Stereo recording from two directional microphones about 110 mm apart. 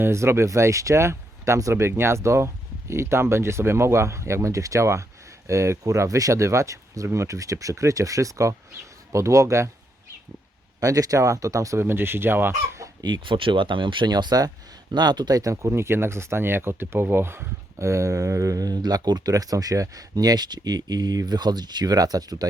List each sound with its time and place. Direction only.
0.0 s speech: 25° right (ahead or behind)
10.8 s speech: 30° right (ahead or behind)
13.0 s speech: 40° right (ahead or behind)